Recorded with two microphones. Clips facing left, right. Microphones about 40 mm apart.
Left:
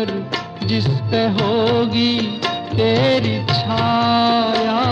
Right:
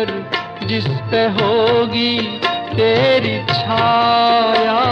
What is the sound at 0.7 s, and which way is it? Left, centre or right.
Music of bollywood, centre.